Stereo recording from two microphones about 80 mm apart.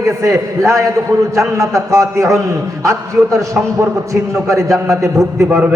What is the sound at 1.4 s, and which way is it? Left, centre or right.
A man's voice, right.